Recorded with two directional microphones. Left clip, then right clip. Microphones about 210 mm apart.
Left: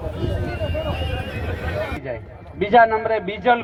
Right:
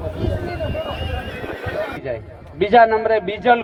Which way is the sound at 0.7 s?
Centre (ahead or behind).